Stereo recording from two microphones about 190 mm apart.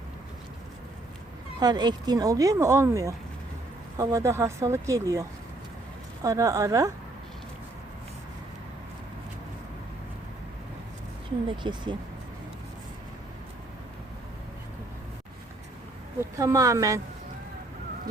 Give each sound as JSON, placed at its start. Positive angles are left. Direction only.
{"t": 1.5, "sound": "speech", "side_deg": -20}
{"t": 6.2, "sound": "speech", "side_deg": -15}
{"t": 11.5, "sound": "speech", "side_deg": -25}
{"t": 16.4, "sound": "speech", "side_deg": -15}